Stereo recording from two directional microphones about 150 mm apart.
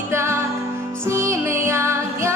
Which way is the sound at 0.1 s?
15° right (ahead or behind).